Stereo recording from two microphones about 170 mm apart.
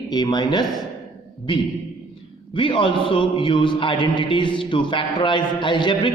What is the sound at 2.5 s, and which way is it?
A man's voice, 30° left (ahead or behind).